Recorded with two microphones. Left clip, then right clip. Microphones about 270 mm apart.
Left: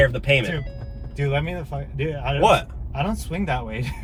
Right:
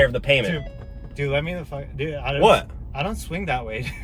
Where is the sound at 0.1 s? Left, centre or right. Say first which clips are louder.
Right 1 dB; centre.